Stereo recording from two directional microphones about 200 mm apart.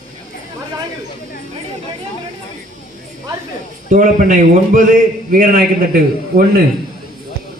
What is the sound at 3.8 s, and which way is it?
A man's voice, 40° right (ahead or behind).